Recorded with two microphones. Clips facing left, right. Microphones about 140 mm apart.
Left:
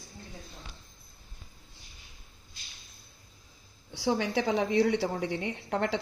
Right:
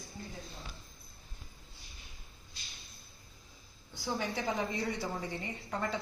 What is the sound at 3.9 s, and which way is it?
A woman's voice, 90° left.